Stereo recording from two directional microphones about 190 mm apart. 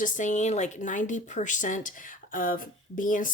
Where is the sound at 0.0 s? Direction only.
40° left (ahead or behind).